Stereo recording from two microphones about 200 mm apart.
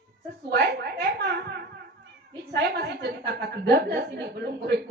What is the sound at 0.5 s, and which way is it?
A woman's voice, 55° right (ahead or behind).